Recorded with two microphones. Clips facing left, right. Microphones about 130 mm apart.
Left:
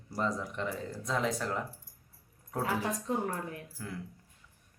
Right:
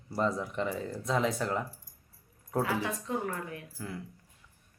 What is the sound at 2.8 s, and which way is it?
Speech, 40° left (ahead or behind).